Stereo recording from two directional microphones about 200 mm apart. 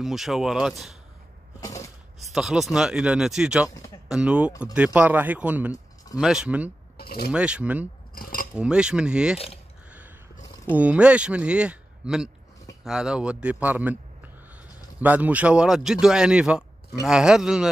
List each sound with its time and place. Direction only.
0.0 s speech: centre (ahead or behind)
1.6 s a sound: 15° left (ahead or behind)
2.1 s speech: centre (ahead or behind)
7.0 s a sound: 50° left (ahead or behind)
7.3 s speech: 5° right (ahead or behind)
8.1 s cutlery: 45° left (ahead or behind)
8.5 s speech: 5° right (ahead or behind)
9.8 s a sound: 5° right (ahead or behind)
10.7 s speech: 5° right (ahead or behind)
15.0 s speech: 10° right (ahead or behind)